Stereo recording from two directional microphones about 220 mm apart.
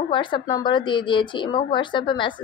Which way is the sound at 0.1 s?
20° left (ahead or behind).